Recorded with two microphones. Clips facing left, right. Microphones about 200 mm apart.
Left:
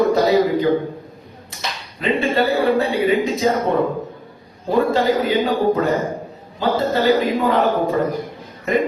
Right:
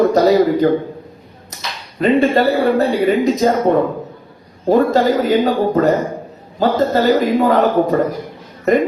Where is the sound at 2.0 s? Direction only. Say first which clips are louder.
Right 5 dB; 40° right (ahead or behind).